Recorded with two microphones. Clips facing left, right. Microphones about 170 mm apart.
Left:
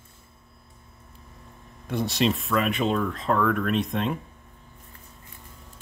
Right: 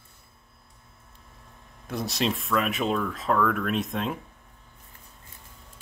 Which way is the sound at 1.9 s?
Centre (ahead or behind).